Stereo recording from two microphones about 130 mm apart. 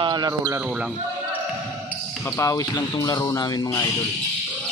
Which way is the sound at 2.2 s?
20° left (ahead or behind).